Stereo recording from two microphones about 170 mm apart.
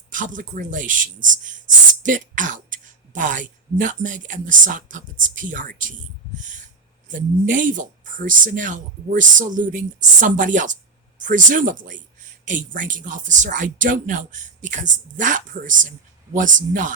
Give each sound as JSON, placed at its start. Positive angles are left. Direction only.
{"t": 0.1, "sound": "speech", "side_deg": -50}
{"t": 6.3, "sound": "owl", "side_deg": -45}
{"t": 7.1, "sound": "speech", "side_deg": -50}